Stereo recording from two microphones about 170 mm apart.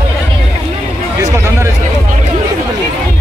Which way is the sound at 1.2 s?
20° right (ahead or behind).